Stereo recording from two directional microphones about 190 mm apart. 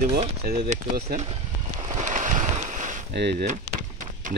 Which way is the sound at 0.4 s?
50° right (ahead or behind).